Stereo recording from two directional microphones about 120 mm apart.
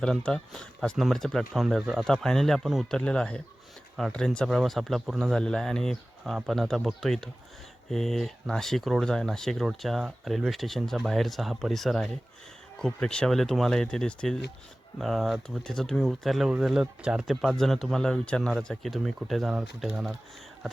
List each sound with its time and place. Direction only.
0.0 s speech: 10° left (ahead or behind)